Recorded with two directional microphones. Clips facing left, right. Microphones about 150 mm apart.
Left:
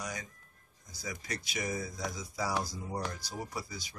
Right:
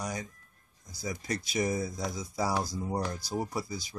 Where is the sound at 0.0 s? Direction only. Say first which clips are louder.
Right 5 dB; 35° right (ahead or behind).